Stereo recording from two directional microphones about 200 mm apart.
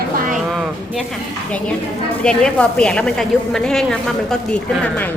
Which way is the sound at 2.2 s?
5° left (ahead or behind).